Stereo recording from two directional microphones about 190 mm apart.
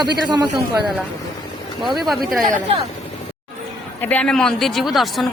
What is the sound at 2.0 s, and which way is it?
Speech, centre (ahead or behind).